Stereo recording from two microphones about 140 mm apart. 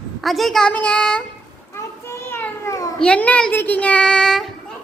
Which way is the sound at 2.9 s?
5° left (ahead or behind).